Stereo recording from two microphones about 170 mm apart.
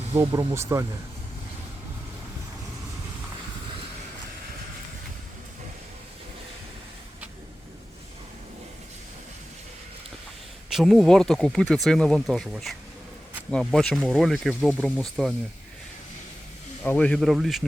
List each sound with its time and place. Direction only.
0.2 s speech: 20° right (ahead or behind)
10.7 s speech: centre (ahead or behind)
16.8 s speech: 10° left (ahead or behind)